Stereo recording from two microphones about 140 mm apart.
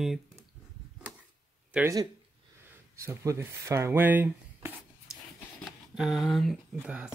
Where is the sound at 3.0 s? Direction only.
20° right (ahead or behind).